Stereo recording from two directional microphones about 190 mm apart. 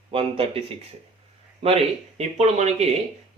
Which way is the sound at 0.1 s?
30° right (ahead or behind).